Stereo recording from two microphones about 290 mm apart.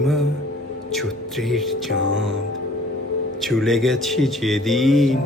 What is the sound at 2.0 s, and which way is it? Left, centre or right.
Music, right.